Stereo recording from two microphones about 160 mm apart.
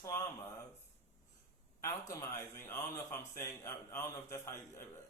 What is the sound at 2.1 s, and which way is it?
Speech, 15° left (ahead or behind).